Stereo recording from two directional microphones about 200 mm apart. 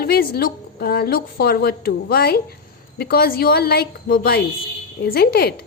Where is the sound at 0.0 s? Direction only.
50° left (ahead or behind).